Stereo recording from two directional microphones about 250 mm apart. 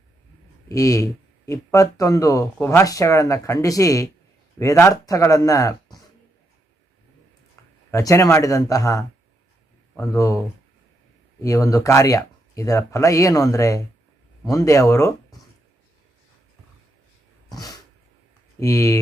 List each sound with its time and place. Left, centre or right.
0.7 s speech: centre
7.9 s speech: centre
11.3 s speech: centre
17.5 s cat: centre
18.6 s speech: centre